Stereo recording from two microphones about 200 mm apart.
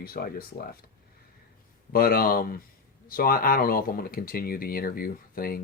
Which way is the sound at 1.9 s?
50° left (ahead or behind).